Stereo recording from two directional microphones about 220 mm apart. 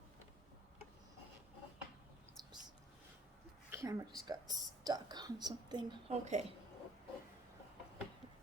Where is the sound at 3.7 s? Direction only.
15° right (ahead or behind).